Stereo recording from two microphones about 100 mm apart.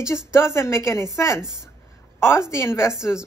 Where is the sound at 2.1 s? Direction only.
25° left (ahead or behind).